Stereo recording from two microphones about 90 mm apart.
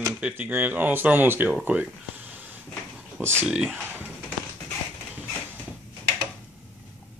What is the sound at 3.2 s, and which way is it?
Speech, 25° right (ahead or behind).